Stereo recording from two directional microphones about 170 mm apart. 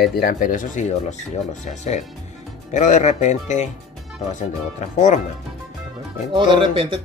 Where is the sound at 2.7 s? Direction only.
45° left (ahead or behind).